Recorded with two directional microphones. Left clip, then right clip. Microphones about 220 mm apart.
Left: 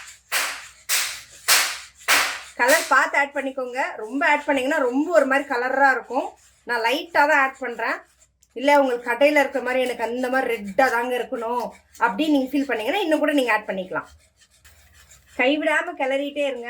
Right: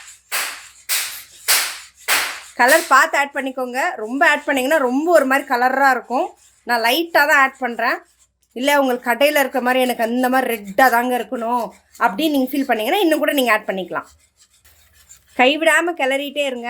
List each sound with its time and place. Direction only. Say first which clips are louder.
2.6 s speech: right 5 dB; 45° right (ahead or behind)
15.4 s speech: right 6 dB; 50° right (ahead or behind)